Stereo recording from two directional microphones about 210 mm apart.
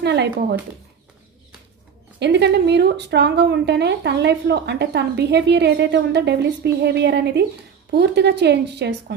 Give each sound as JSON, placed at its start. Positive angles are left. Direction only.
{"t": 0.0, "sound": "speech", "side_deg": -55}
{"t": 2.1, "sound": "speech", "side_deg": -55}